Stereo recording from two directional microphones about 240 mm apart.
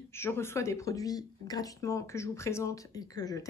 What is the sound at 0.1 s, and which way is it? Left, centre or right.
Speech, centre.